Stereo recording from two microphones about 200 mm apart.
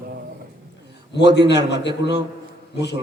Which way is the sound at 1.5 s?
60° left (ahead or behind).